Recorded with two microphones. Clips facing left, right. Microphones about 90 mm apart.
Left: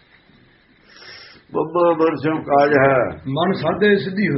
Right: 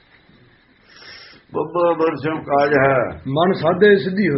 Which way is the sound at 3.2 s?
35° right (ahead or behind).